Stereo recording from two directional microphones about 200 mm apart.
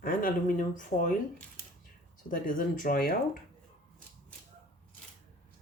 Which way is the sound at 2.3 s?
45° left (ahead or behind).